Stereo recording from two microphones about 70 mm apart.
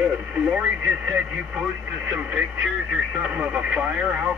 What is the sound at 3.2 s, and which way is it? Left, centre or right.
Speech, centre.